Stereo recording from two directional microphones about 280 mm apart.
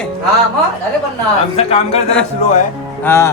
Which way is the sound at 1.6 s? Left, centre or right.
Left.